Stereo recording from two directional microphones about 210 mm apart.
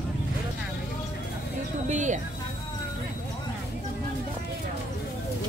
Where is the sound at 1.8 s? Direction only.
35° right (ahead or behind).